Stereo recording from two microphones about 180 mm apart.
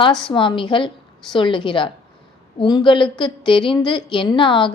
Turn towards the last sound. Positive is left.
turn(degrees=25)  # may be behind; listen again after turning